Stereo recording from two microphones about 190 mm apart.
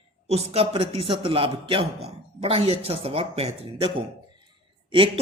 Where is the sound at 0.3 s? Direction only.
30° right (ahead or behind).